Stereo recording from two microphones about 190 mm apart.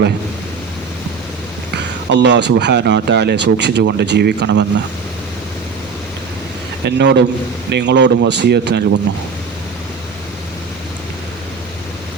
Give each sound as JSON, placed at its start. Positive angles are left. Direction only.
{"t": 1.7, "sound": "speech", "side_deg": -65}
{"t": 6.8, "sound": "a man's voice", "side_deg": -65}